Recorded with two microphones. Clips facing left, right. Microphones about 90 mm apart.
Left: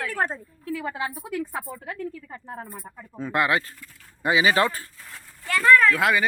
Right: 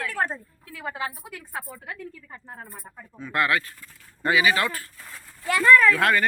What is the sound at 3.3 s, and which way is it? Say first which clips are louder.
Speech: left 1 dB; 20° left (ahead or behind).